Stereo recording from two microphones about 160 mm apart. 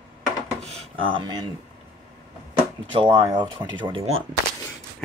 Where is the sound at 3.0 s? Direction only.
30° right (ahead or behind).